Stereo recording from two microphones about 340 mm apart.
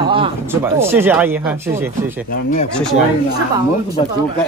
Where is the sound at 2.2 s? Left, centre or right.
Left.